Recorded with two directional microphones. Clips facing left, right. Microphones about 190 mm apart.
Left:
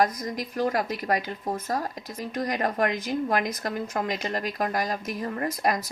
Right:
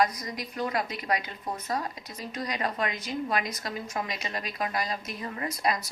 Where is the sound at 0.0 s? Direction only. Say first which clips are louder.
Left 2 dB; 50° left (ahead or behind).